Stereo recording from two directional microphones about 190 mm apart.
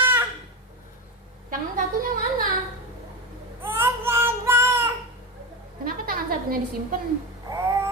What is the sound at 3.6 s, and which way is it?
Child singing, 10° right (ahead or behind).